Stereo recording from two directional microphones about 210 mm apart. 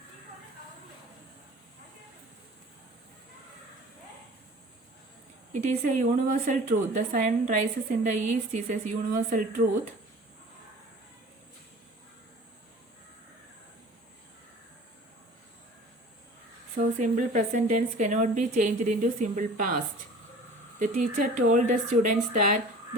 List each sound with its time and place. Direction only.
5.5 s a woman's voice: 35° right (ahead or behind)
16.7 s a woman's voice: 35° right (ahead or behind)